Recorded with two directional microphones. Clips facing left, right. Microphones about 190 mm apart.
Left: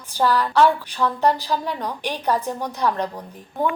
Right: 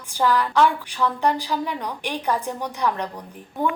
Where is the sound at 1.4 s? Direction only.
15° right (ahead or behind).